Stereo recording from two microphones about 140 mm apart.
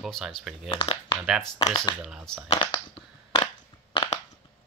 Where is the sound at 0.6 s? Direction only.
40° left (ahead or behind).